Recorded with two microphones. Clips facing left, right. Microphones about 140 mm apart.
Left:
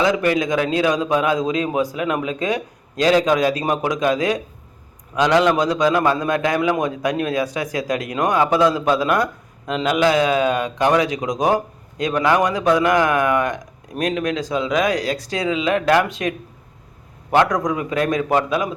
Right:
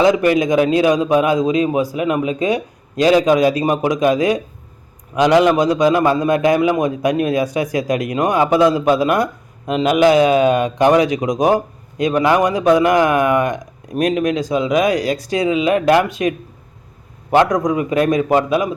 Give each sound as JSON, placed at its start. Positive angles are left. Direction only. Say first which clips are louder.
{"t": 0.0, "sound": "a man's voice", "louder": "right 5 dB", "side_deg": -15}
{"t": 17.3, "sound": "a man's voice", "louder": "right 3 dB", "side_deg": -10}